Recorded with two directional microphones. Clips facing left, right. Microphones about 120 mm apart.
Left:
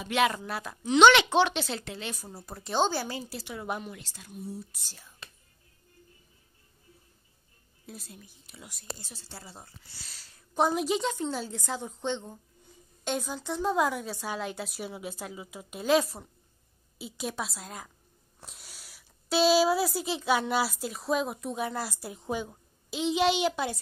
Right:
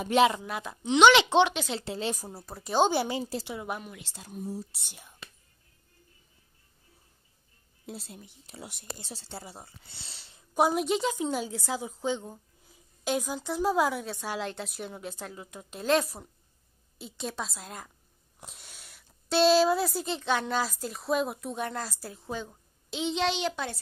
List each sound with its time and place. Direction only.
0.3 s a woman's voice: 15° right (ahead or behind)
1.8 s a woman's voice: 30° right (ahead or behind)
2.3 s speech: 5° right (ahead or behind)
2.9 s a woman's voice: 25° right (ahead or behind)
3.6 s speech: 5° right (ahead or behind)
4.0 s a woman's voice: 25° right (ahead or behind)
4.3 s speech: 40° right (ahead or behind)
4.7 s a woman's voice: 20° right (ahead or behind)
7.8 s a woman's voice: 30° right (ahead or behind)
10.5 s speech: 5° right (ahead or behind)
11.1 s speech: 10° right (ahead or behind); by 23.8 s 10° left (ahead or behind)